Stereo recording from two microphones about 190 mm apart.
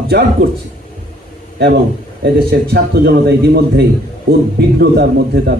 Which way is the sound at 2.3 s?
55° right (ahead or behind).